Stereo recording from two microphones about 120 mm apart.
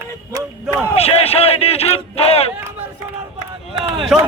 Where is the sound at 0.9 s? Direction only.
60° left (ahead or behind).